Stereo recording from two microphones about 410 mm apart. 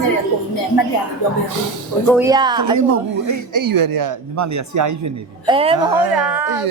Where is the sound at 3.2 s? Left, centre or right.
Right.